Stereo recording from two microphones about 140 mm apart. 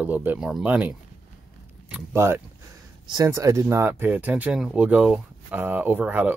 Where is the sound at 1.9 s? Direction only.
15° right (ahead or behind).